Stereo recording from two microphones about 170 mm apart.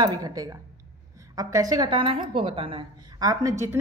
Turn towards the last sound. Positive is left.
turn(degrees=-20)  # may be behind; listen again after turning